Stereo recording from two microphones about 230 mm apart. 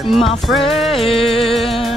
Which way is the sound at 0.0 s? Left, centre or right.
Centre.